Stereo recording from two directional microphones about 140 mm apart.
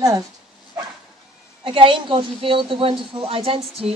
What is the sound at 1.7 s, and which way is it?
A woman's voice, 40° right (ahead or behind).